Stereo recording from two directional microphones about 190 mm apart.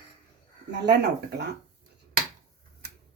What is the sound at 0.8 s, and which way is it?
Speech, 60° right (ahead or behind).